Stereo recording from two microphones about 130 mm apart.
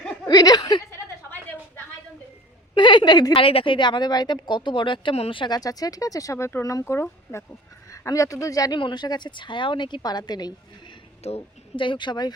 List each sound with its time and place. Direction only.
0.3 s speech: 30° left (ahead or behind)
2.7 s speech: 35° left (ahead or behind)
3.4 s speech: 45° left (ahead or behind)
11.2 s a woman's voice: 55° left (ahead or behind)
11.8 s speech: 40° left (ahead or behind)